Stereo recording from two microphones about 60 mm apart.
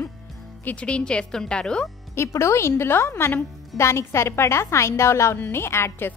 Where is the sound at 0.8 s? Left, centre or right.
Centre.